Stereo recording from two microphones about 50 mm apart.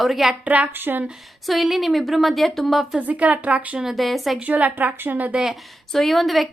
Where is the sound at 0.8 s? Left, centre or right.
Right.